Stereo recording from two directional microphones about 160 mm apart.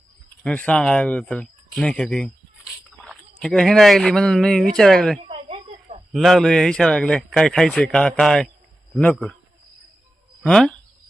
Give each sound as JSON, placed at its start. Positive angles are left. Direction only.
{"t": 0.4, "sound": "speech", "side_deg": 10}
{"t": 5.3, "sound": "a sound", "side_deg": -40}
{"t": 6.1, "sound": "a man's voice", "side_deg": 0}
{"t": 10.4, "sound": "speech", "side_deg": 5}